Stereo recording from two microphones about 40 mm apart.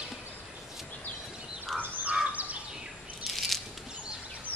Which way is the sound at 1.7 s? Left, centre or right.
Centre.